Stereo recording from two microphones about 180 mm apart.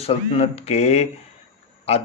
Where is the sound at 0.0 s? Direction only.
35° left (ahead or behind).